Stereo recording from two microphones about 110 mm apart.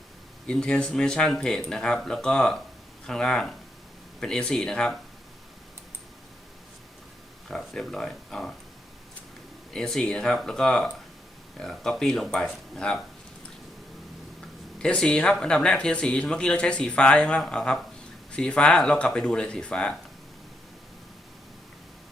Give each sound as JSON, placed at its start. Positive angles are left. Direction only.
{"t": 0.4, "sound": "speech", "side_deg": 10}
{"t": 7.4, "sound": "speech", "side_deg": 5}
{"t": 9.7, "sound": "speech", "side_deg": 5}
{"t": 14.8, "sound": "speech", "side_deg": 10}